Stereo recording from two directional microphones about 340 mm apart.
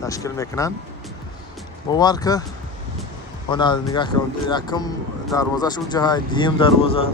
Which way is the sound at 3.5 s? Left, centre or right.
Centre.